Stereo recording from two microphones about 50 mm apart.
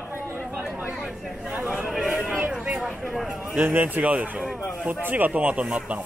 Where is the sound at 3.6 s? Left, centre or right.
Right.